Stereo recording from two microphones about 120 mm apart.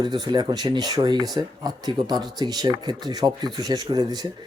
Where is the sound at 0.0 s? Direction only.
35° right (ahead or behind).